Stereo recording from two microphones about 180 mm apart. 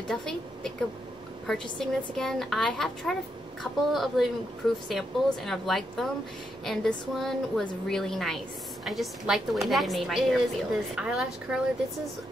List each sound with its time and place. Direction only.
0.1 s a woman's voice: 5° left (ahead or behind)